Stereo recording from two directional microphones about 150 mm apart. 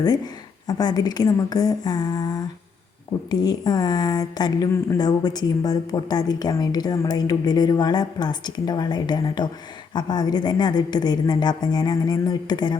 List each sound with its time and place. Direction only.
0.7 s speech: 25° left (ahead or behind)